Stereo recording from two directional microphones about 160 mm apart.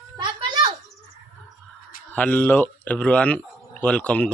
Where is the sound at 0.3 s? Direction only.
30° right (ahead or behind).